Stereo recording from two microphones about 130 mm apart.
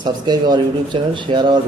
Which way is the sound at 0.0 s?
35° right (ahead or behind).